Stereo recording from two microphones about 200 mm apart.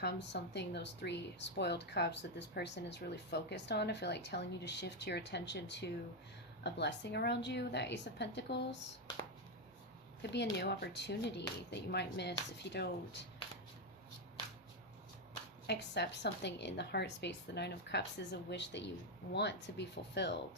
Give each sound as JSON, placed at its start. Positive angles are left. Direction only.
{"t": 0.0, "sound": "a woman's voice", "side_deg": 60}
{"t": 10.3, "sound": "a woman's voice", "side_deg": 60}
{"t": 15.6, "sound": "a woman's voice", "side_deg": 55}